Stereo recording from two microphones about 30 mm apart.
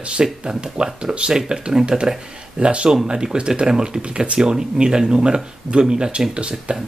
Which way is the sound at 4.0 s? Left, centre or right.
Right.